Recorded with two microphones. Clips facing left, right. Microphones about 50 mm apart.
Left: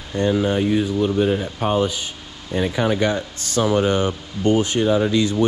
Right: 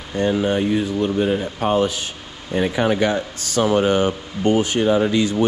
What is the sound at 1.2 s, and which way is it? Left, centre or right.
Speech, right.